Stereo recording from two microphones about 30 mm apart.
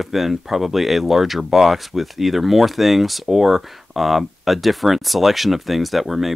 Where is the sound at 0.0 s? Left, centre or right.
Centre.